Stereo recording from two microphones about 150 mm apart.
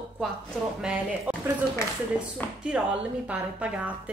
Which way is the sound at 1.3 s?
10° right (ahead or behind).